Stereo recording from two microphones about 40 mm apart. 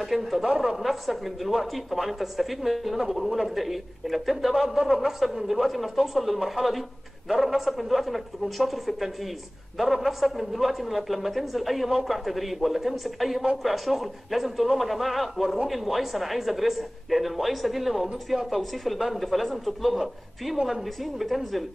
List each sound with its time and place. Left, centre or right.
0.0 s speech: centre
0.4 s speech: centre
0.7 s speech: centre